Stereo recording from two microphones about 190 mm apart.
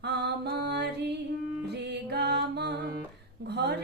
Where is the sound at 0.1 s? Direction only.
60° right (ahead or behind).